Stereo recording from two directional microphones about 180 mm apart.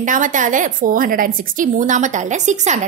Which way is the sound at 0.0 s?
45° right (ahead or behind).